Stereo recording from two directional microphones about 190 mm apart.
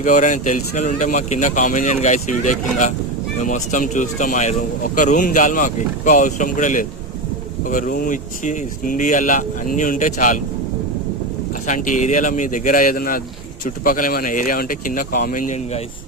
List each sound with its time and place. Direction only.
0.0 s speech: 40° left (ahead or behind)
11.6 s speech: 40° left (ahead or behind)